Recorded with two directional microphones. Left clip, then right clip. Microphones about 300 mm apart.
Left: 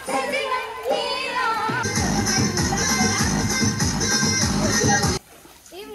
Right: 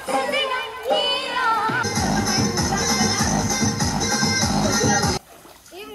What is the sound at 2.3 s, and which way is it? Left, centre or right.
Music, right.